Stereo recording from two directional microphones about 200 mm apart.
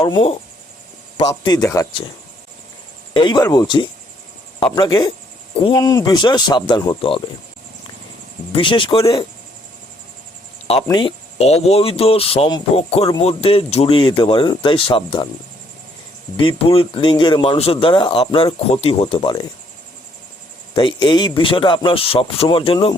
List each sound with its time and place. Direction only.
0.0 s speech: 30° left (ahead or behind)
1.3 s a man's voice: 15° left (ahead or behind)
3.1 s speech: 20° left (ahead or behind)
8.5 s speech: 25° left (ahead or behind)
10.8 s speech: 20° left (ahead or behind)
16.4 s speech: 25° left (ahead or behind)
20.7 s speech: 25° left (ahead or behind)